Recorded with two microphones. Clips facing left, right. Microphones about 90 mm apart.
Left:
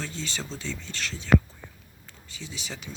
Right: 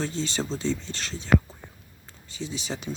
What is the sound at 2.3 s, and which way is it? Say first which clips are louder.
Speech: right 7 dB; 25° right (ahead or behind).